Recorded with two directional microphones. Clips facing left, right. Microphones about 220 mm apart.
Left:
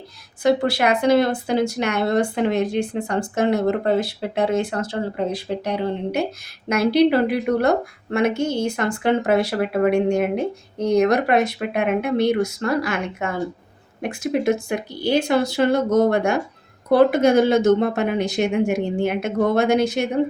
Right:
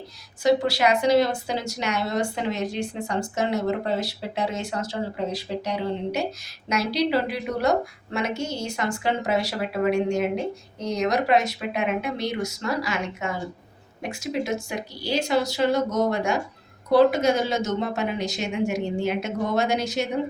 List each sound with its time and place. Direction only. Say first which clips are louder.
0.4 s a woman's voice: left 2 dB; 55° left (ahead or behind)